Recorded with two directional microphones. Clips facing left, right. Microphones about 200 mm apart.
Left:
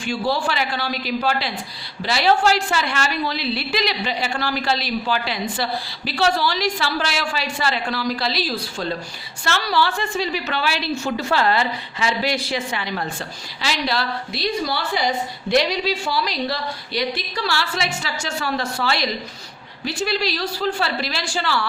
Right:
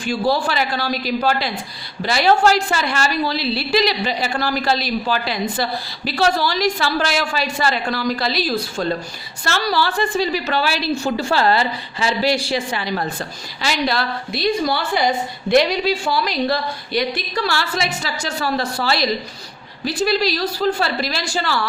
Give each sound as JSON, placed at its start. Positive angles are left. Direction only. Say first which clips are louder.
{"t": 0.0, "sound": "a woman's voice", "louder": "right 3 dB", "side_deg": -40}
{"t": 13.6, "sound": "a woman's voice", "louder": "right 3 dB", "side_deg": -50}